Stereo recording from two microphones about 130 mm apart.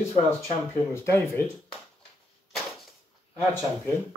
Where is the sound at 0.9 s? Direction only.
20° left (ahead or behind).